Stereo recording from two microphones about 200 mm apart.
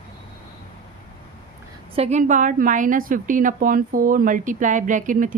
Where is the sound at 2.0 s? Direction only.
35° right (ahead or behind).